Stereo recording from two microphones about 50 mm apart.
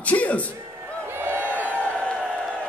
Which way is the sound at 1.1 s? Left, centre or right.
Right.